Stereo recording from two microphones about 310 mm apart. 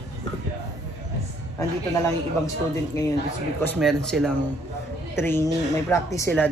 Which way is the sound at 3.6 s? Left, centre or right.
Centre.